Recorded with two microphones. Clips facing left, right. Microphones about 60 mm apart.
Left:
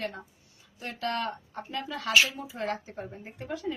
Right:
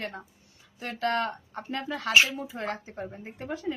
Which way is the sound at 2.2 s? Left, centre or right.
Right.